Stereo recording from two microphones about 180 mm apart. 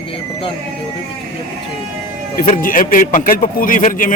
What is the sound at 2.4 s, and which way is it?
A man's voice, 50° left (ahead or behind).